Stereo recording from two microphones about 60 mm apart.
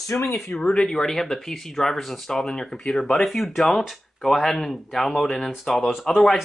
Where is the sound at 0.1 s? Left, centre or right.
Left.